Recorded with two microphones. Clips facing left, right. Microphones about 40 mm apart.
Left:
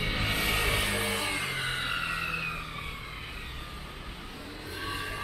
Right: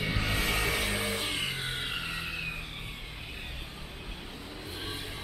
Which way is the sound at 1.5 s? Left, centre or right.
Left.